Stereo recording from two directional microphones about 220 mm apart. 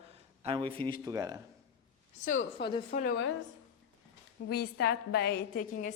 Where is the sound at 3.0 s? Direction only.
50° left (ahead or behind).